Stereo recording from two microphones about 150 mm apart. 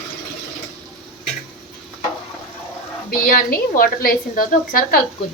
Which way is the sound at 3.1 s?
75° left (ahead or behind).